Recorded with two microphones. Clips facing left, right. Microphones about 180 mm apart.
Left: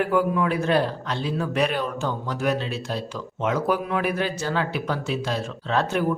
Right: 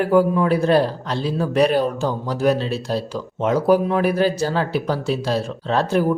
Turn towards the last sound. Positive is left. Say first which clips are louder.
# right 4 dB
turn(degrees=-35)  # may be behind; listen again after turning